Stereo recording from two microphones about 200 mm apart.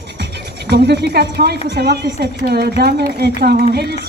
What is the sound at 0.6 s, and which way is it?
Speech, 55° right (ahead or behind).